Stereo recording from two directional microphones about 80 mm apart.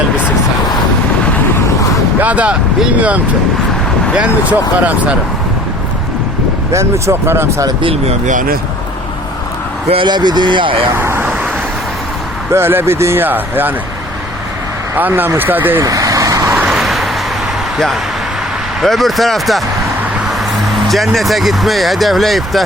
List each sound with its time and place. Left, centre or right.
2.2 s speech: centre
4.5 s speech: centre
6.7 s speech: right
10.0 s speech: right
10.9 s vehicle: right
12.5 s speech: right
14.9 s speech: right
15.8 s vehicle: right
16.6 s vehicle: centre
18.8 s speech: centre
20.8 s speech: centre